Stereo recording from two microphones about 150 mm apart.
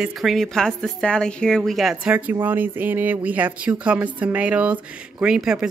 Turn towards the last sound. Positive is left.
turn(degrees=-5)  # may be behind; listen again after turning